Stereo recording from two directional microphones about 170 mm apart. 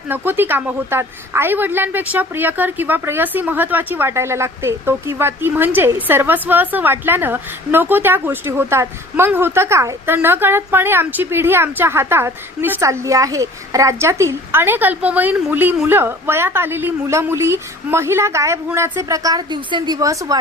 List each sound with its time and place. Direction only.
0.1 s a woman's voice: 10° right (ahead or behind)